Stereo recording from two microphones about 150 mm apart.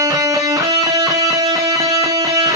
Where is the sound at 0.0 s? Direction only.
25° right (ahead or behind).